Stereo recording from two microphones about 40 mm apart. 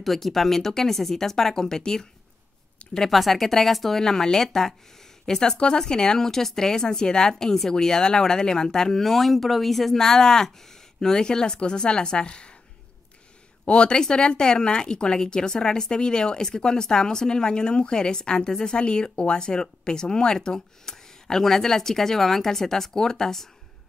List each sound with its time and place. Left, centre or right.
0.0 s a woman's voice: centre
3.1 s a woman's voice: centre; by 12.5 s left
13.7 s a woman's voice: left